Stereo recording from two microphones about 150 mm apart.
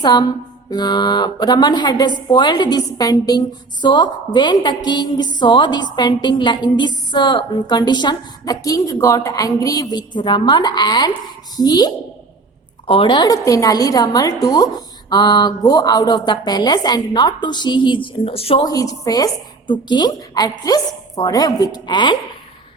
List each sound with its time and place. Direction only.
0.0 s speech: 25° left (ahead or behind)
18.6 s speech: 25° left (ahead or behind)